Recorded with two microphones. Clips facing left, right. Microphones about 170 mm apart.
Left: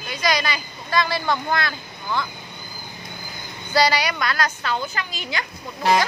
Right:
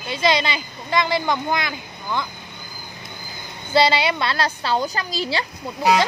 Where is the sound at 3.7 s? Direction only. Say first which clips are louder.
Right 2 dB; 25° right (ahead or behind).